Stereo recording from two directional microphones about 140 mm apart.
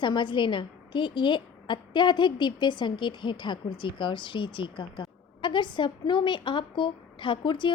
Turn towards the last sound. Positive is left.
turn(degrees=35)  # may be behind; listen again after turning